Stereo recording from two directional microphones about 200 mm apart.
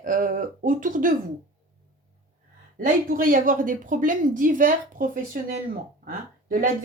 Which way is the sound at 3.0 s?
45° right (ahead or behind).